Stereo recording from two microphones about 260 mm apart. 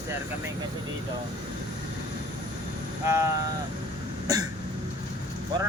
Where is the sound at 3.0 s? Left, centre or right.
Centre.